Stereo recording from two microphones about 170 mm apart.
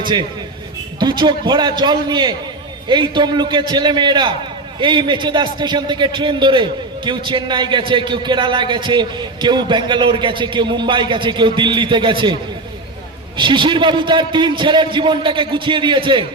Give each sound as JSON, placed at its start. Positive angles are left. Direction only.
{"t": 0.0, "sound": "a man's voice", "side_deg": -25}